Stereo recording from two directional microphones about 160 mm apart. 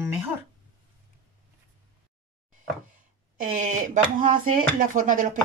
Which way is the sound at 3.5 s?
50° right (ahead or behind).